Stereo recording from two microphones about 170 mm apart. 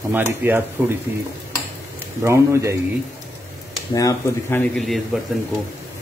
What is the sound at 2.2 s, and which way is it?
Speech, 15° right (ahead or behind).